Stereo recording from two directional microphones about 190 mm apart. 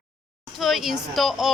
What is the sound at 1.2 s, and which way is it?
Speech, centre (ahead or behind).